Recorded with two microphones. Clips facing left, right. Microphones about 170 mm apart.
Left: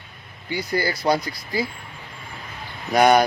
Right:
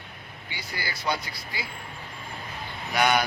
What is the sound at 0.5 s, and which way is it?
Speech, 45° left (ahead or behind).